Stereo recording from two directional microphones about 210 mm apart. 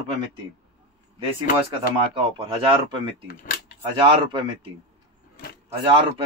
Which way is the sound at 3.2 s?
40° left (ahead or behind).